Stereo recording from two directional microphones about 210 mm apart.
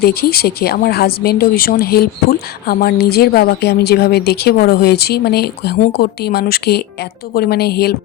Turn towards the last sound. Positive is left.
turn(degrees=50)  # may be behind; listen again after turning